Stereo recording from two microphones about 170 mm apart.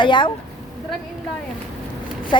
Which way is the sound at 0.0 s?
30° left (ahead or behind).